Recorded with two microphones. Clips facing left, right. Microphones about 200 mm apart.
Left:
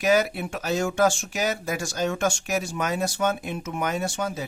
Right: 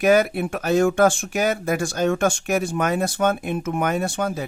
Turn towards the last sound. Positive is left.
turn(degrees=-55)  # may be behind; listen again after turning